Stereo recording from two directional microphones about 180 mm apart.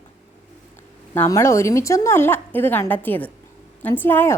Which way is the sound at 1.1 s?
15° left (ahead or behind).